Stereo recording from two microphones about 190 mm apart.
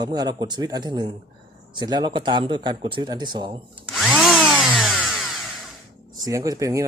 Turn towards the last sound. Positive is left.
turn(degrees=-15)  # may be behind; listen again after turning